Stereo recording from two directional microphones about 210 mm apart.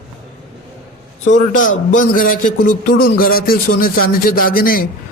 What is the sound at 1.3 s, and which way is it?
A man's voice, 40° left (ahead or behind).